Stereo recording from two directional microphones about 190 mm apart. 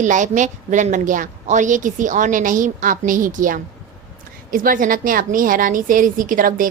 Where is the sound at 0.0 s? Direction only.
40° right (ahead or behind).